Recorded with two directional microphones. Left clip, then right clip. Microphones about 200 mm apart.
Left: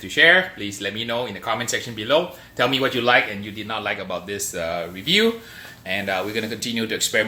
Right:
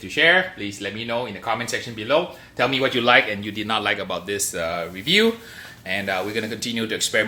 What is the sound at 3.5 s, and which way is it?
Speech, 50° right (ahead or behind).